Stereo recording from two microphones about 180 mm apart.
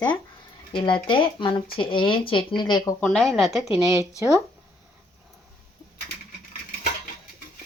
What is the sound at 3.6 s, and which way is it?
Speech, 15° right (ahead or behind).